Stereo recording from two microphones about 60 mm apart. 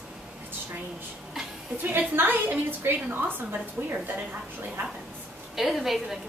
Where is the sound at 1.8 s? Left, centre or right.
Right.